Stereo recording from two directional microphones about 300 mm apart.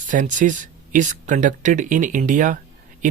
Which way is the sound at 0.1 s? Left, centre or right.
Right.